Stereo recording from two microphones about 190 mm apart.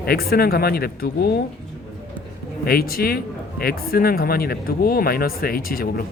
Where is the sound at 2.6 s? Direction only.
50° left (ahead or behind).